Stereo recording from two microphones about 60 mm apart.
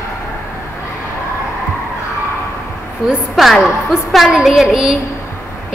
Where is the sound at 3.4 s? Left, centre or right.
Centre.